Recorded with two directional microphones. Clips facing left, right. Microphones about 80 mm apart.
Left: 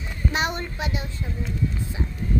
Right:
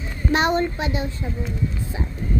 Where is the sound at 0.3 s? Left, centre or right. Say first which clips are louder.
Right 7 dB; right.